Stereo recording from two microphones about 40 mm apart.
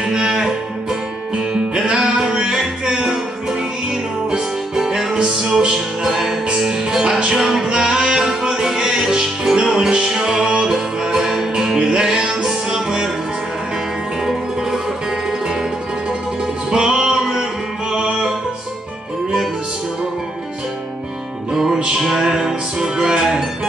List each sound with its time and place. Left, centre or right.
0.0 s music: centre
6.0 s music: centre
14.2 s music: centre
16.7 s music: centre
21.5 s music: centre